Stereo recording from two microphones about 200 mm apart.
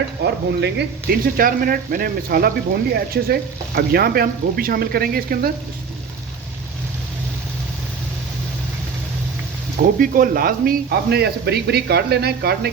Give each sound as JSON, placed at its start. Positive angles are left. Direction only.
{"t": 0.6, "sound": "speech", "side_deg": -55}
{"t": 9.7, "sound": "speech", "side_deg": -45}